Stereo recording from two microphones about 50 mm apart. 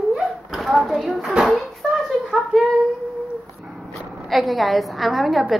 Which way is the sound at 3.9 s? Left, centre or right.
Centre.